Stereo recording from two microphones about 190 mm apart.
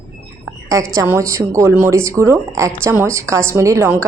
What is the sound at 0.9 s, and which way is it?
A woman's voice, 10° right (ahead or behind).